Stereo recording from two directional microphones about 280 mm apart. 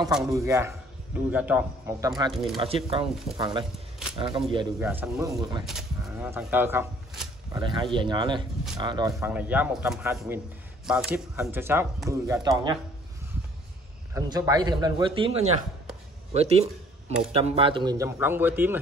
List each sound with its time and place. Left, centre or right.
0.1 s speech: centre
4.8 s speech: centre
5.8 s speech: centre
14.1 s speech: centre